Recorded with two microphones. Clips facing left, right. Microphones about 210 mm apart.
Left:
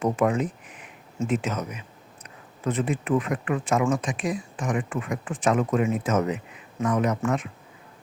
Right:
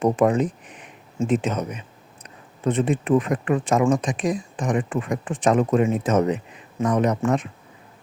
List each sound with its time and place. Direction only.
0.0 s speech: 35° right (ahead or behind)